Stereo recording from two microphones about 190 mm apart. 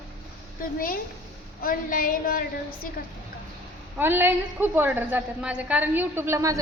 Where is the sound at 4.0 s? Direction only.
10° right (ahead or behind).